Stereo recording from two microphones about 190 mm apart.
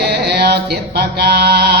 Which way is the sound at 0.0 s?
60° right (ahead or behind).